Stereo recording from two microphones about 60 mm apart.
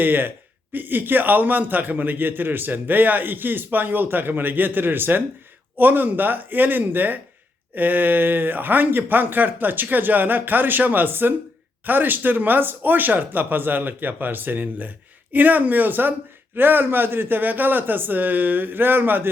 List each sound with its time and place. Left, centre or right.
0.0 s a man's voice: right